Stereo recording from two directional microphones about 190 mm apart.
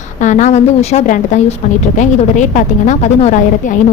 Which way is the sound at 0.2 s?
40° left (ahead or behind).